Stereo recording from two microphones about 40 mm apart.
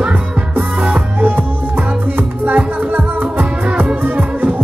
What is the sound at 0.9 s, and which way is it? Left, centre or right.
Music, right.